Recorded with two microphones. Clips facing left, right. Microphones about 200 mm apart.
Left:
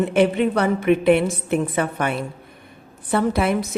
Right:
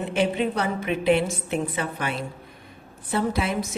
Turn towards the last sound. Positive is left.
turn(degrees=60)  # may be behind; listen again after turning